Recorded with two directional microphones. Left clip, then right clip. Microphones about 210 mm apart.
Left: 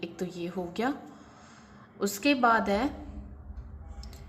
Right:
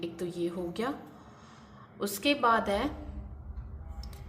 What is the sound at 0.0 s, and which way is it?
Speech, 25° left (ahead or behind).